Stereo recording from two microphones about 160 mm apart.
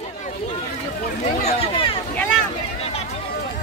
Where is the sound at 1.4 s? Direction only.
35° left (ahead or behind).